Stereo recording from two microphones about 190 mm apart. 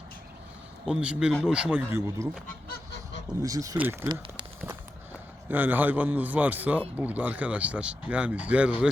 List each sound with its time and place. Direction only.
0.9 s a man's voice: 5° right (ahead or behind)
2.6 s goose: 60° left (ahead or behind)
3.4 s speech: 20° right (ahead or behind)
5.5 s speech: 10° right (ahead or behind)